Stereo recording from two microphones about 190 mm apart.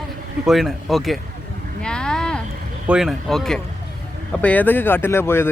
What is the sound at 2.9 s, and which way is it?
Speech, centre (ahead or behind).